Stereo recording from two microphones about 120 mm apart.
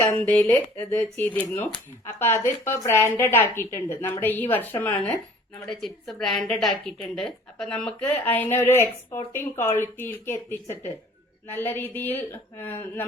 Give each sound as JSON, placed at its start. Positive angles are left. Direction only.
{"t": 0.3, "sound": "a woman's voice", "side_deg": 15}
{"t": 5.6, "sound": "a woman's voice", "side_deg": 5}